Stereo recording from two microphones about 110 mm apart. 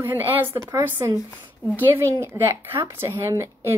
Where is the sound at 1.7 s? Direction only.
25° right (ahead or behind).